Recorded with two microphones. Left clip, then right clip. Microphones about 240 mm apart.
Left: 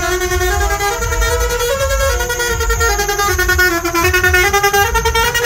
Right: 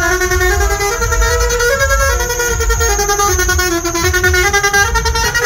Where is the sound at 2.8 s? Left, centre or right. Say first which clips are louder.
Right 2 dB; centre.